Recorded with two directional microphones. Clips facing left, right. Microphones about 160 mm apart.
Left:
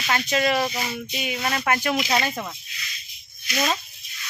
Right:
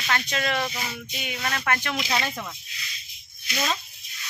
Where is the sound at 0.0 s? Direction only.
10° left (ahead or behind).